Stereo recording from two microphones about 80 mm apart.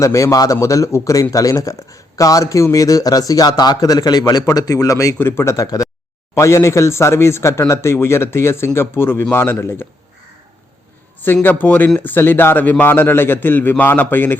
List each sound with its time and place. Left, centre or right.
0.0 s a man's voice: left
3.5 s a man's voice: left
5.1 s a man's voice: left
11.6 s a man's voice: centre